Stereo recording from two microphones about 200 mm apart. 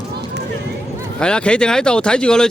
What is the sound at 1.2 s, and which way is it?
Speech, 5° left (ahead or behind).